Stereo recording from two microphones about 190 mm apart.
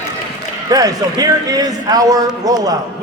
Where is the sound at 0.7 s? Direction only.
20° right (ahead or behind).